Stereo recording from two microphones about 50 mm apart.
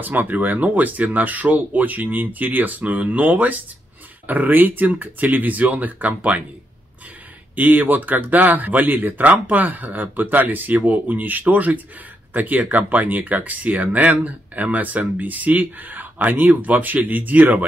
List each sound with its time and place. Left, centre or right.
0.0 s speech: right
7.5 s speech: right